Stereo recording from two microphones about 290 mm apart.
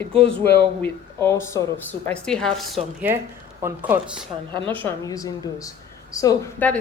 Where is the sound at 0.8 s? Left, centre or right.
Centre.